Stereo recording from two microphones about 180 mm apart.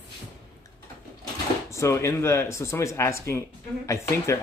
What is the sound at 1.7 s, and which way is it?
Speech, 15° left (ahead or behind).